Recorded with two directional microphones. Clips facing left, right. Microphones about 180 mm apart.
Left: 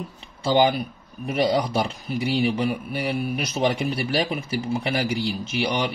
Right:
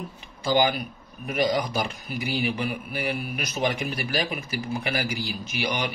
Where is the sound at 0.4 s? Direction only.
30° left (ahead or behind).